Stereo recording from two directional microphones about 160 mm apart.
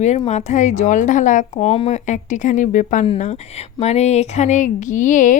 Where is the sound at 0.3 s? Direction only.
45° left (ahead or behind).